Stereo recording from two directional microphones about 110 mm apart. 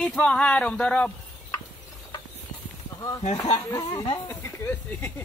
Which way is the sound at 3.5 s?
35° left (ahead or behind).